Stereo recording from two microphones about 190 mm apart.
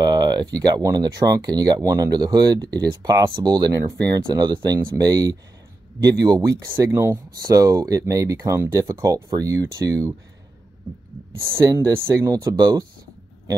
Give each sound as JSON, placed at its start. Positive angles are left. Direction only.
{"t": 0.2, "sound": "speech", "side_deg": -20}
{"t": 11.4, "sound": "speech", "side_deg": -15}